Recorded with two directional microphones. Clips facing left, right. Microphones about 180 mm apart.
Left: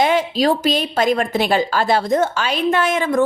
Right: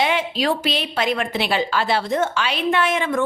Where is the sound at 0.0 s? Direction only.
40° left (ahead or behind).